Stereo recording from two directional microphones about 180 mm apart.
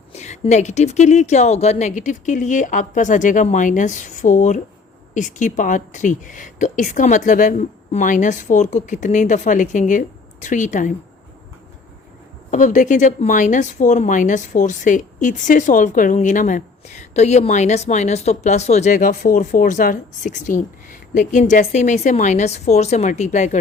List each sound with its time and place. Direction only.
0.1 s speech: 40° left (ahead or behind)
12.5 s speech: 45° left (ahead or behind)